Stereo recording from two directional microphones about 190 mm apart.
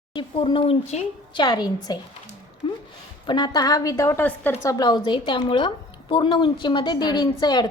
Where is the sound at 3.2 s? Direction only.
20° left (ahead or behind).